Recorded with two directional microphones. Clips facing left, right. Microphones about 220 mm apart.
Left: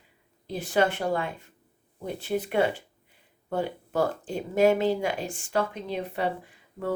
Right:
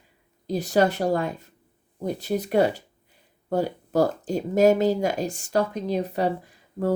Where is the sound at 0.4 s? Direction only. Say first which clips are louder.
Right 4 dB; 40° right (ahead or behind).